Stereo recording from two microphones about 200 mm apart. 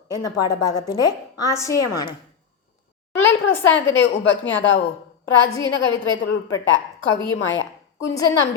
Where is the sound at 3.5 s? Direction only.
10° left (ahead or behind).